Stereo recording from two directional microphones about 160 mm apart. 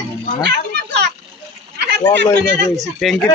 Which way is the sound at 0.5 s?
90° right.